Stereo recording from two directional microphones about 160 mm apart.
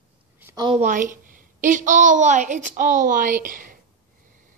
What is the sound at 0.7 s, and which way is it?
Speech, 55° right (ahead or behind).